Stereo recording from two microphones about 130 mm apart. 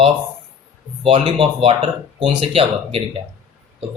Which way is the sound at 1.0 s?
40° right (ahead or behind).